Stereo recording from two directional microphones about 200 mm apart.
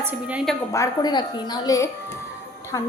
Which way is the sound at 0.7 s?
20° left (ahead or behind).